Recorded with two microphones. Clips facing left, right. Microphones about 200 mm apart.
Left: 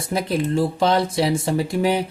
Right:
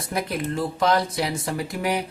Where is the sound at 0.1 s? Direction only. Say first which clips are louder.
Left 5 dB; 30° left (ahead or behind).